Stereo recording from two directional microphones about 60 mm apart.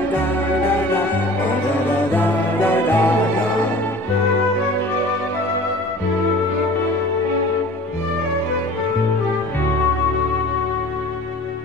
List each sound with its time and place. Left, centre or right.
0.1 s music: left